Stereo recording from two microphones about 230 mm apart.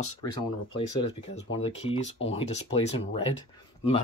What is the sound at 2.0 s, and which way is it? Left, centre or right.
Speech, left.